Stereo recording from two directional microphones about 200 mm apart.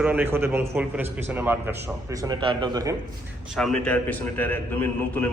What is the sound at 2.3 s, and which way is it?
Speech, 20° right (ahead or behind).